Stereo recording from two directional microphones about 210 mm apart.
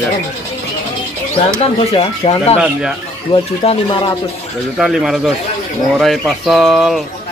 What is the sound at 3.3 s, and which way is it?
Speech, 25° left (ahead or behind).